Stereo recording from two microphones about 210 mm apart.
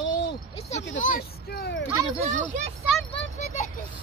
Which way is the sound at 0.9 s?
40° left (ahead or behind).